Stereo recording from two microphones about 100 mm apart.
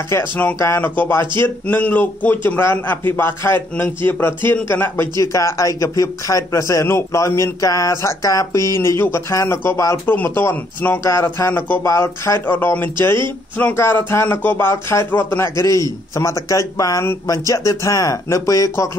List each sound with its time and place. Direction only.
0.1 s a man's voice: 30° left (ahead or behind)
12.4 s a man's voice: 20° left (ahead or behind)